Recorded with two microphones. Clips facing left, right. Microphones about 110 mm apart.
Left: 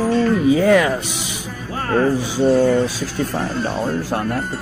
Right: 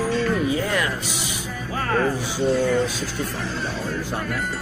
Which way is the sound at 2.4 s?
50° left (ahead or behind).